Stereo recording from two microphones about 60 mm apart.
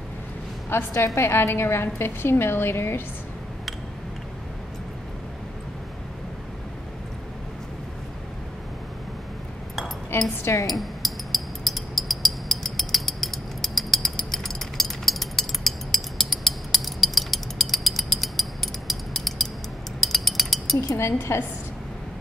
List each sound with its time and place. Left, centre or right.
0.9 s a woman's voice: left
1.2 s a woman's voice: left
10.4 s speech: left
10.7 s a sound: centre
20.9 s a woman's voice: left